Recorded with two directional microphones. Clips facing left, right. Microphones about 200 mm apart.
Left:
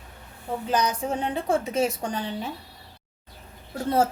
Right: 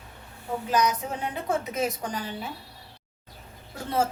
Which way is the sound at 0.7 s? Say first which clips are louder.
Left 1 dB; 30° left (ahead or behind).